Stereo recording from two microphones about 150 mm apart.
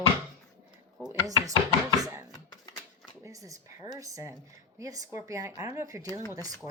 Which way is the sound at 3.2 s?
20° right (ahead or behind).